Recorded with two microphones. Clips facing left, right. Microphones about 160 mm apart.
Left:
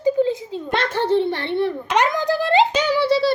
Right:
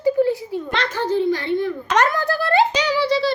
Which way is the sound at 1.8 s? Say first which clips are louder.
Right 2 dB; 15° left (ahead or behind).